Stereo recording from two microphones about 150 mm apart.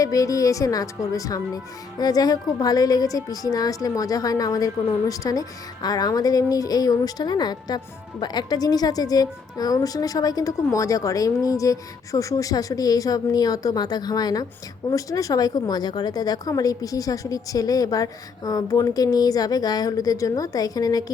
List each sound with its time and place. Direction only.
0.0 s a woman's voice: 20° left (ahead or behind)